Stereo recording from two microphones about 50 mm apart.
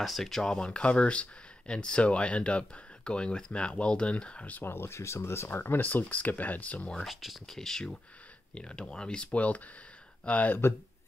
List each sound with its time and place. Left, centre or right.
0.0 s speech: centre; by 4.6 s left
4.6 s speech: left
5.6 s speech: left
7.1 s speech: centre
7.4 s speech: centre
10.2 s speech: left